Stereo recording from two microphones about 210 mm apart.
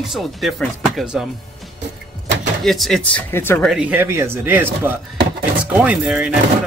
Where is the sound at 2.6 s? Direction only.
Centre (ahead or behind).